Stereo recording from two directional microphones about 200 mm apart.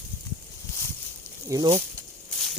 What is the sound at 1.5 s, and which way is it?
Speech, 20° right (ahead or behind).